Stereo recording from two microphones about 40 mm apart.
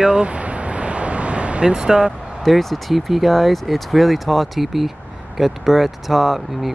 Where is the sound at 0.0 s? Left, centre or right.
Right.